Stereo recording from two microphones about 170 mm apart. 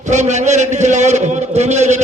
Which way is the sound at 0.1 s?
45° right (ahead or behind).